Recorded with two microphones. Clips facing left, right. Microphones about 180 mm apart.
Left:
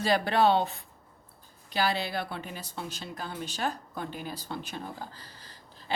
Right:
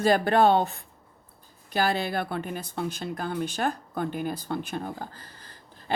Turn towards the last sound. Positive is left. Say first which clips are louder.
# right 2 dB
turn(degrees=-50)  # may be behind; listen again after turning